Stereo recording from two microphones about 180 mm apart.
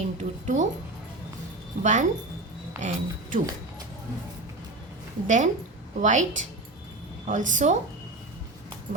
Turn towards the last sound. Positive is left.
turn(degrees=-45)  # may be behind; listen again after turning